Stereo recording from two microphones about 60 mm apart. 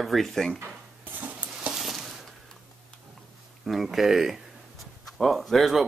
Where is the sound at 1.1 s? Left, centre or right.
Right.